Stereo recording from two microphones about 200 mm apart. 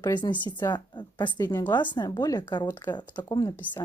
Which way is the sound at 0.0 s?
20° left (ahead or behind).